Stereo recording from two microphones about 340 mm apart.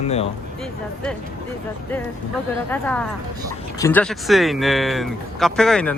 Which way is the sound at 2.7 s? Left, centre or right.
Centre.